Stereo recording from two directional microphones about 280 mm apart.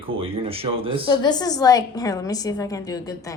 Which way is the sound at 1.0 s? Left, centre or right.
Centre.